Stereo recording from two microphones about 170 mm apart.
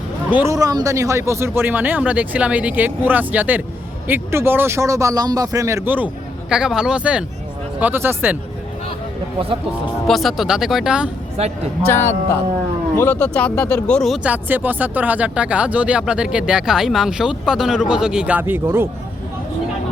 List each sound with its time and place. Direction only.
0.3 s speech: 10° right (ahead or behind)
0.5 s speech: 20° right (ahead or behind)
10.1 s speech: centre (ahead or behind)
11.9 s speech: 15° left (ahead or behind); by 18.9 s 15° right (ahead or behind)